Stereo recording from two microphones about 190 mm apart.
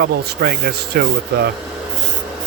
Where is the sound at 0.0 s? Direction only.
55° right (ahead or behind).